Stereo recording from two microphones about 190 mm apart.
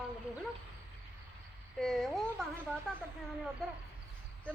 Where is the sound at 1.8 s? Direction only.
Centre (ahead or behind).